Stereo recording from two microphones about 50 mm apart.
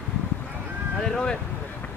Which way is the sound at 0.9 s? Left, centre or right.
Centre.